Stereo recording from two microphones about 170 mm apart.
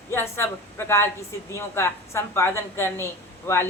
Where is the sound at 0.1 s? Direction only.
15° left (ahead or behind).